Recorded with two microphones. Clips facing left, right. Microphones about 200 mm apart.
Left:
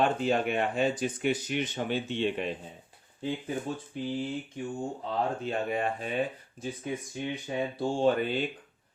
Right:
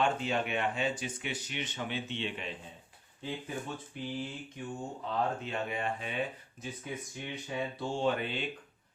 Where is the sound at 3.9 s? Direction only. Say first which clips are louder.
Left 5 dB; 35° left (ahead or behind).